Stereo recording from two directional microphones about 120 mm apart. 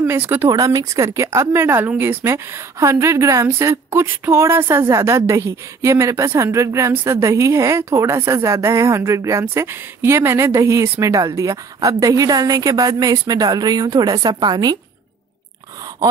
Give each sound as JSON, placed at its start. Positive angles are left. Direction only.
{"t": 0.0, "sound": "speech", "side_deg": -15}
{"t": 0.5, "sound": "speech", "side_deg": -30}